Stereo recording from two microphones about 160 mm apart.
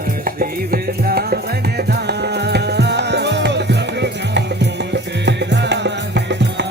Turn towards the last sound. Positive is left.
turn(degrees=-90)